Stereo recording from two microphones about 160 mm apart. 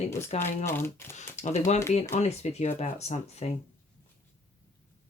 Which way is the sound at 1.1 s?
45° left (ahead or behind).